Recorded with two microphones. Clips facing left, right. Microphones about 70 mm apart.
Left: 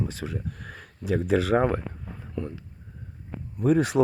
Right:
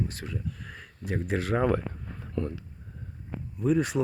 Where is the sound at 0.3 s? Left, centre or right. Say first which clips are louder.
Left 2 dB; left.